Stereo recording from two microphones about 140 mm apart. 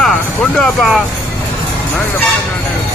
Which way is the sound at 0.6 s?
Centre (ahead or behind).